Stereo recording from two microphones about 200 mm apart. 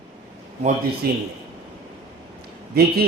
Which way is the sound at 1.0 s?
50° right (ahead or behind).